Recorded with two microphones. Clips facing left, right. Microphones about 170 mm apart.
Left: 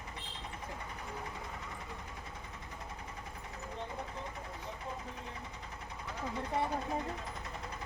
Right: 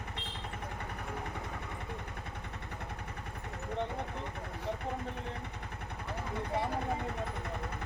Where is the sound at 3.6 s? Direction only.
65° right (ahead or behind).